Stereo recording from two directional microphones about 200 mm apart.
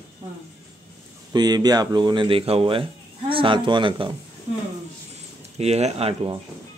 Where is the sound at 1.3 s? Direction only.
20° right (ahead or behind).